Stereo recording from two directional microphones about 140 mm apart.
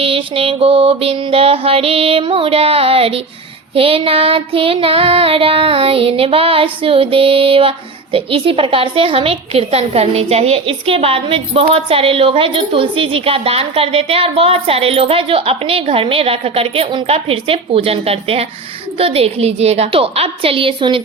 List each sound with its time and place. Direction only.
0.0 s music: 40° right (ahead or behind)
3.8 s child singing: 45° right (ahead or behind)
18.9 s music: 45° right (ahead or behind)